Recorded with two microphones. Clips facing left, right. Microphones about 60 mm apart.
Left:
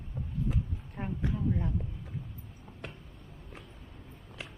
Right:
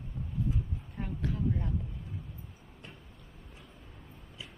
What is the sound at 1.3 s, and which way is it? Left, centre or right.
Speech, centre.